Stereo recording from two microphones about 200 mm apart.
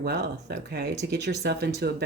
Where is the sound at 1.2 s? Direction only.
55° right (ahead or behind).